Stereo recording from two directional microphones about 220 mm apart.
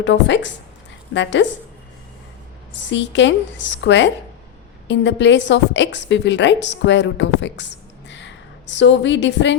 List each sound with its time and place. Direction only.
0.0 s a woman's voice: 55° left (ahead or behind)
2.7 s a woman's voice: 55° left (ahead or behind)